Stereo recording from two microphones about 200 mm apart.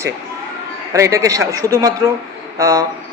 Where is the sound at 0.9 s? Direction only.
15° right (ahead or behind).